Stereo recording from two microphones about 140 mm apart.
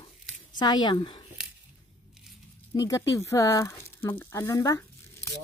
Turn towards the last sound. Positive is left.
turn(degrees=20)  # may be behind; listen again after turning